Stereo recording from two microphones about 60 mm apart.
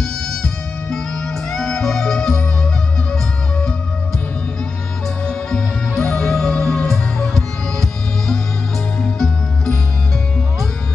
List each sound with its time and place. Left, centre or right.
0.0 s music: centre
5.2 s music: centre